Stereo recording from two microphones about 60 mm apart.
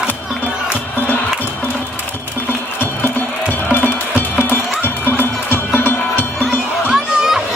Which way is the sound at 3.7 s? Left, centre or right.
Left.